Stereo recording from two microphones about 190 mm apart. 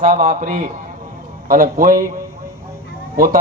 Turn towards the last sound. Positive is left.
turn(degrees=-50)  # may be behind; listen again after turning